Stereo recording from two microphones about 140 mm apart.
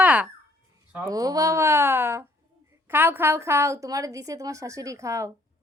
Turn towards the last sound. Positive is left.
turn(degrees=-20)  # may be behind; listen again after turning